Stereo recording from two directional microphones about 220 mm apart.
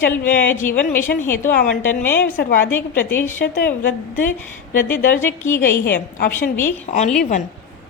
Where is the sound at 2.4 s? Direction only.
40° left (ahead or behind).